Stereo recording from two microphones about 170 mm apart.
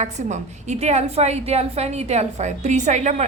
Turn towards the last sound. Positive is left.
turn(degrees=-45)  # may be behind; listen again after turning